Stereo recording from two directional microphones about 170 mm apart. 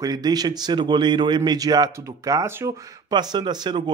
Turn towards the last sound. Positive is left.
turn(degrees=-25)  # may be behind; listen again after turning